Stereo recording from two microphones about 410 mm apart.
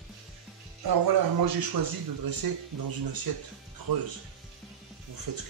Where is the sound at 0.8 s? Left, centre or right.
Right.